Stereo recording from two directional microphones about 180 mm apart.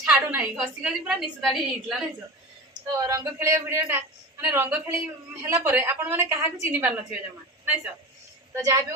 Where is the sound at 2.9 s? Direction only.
20° right (ahead or behind).